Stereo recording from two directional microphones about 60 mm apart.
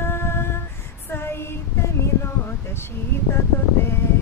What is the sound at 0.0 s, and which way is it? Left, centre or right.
Female singing, left.